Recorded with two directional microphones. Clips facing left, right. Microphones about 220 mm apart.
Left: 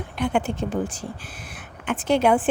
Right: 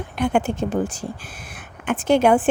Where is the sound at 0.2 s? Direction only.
45° right (ahead or behind).